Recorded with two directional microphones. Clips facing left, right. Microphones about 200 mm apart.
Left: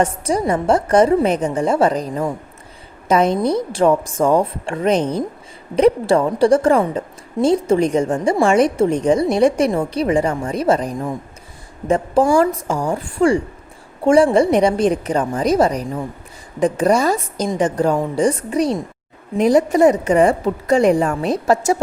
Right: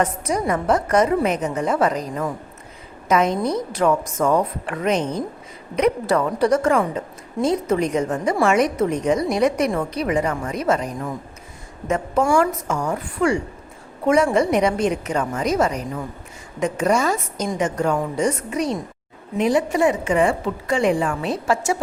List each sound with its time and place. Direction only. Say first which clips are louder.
0.0 s a woman's voice: left 3 dB; 30° left (ahead or behind)